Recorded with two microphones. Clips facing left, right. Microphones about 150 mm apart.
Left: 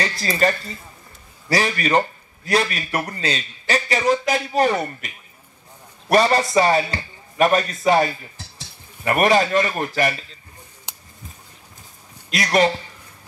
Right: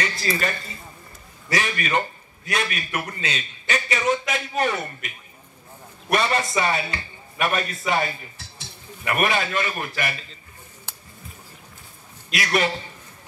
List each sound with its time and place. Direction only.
0.0 s a man's voice: 35° left (ahead or behind)
10.9 s a sound: 15° left (ahead or behind)
12.3 s a man's voice: 35° left (ahead or behind)